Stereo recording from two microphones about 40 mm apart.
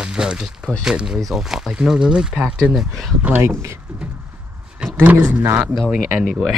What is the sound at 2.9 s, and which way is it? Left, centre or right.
Speech, centre.